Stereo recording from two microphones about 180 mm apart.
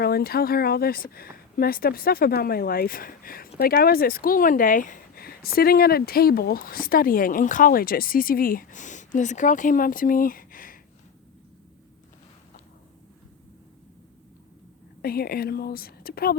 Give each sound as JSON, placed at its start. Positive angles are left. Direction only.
{"t": 0.0, "sound": "speech", "side_deg": 60}
{"t": 15.0, "sound": "speech", "side_deg": 60}